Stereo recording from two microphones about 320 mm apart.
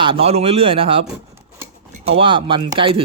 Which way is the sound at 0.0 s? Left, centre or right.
Centre.